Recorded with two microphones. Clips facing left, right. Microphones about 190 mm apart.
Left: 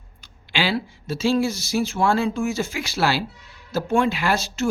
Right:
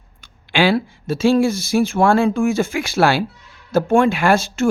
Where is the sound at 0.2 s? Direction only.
50° right (ahead or behind).